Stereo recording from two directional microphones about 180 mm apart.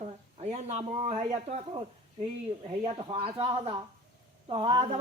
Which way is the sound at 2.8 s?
30° right (ahead or behind).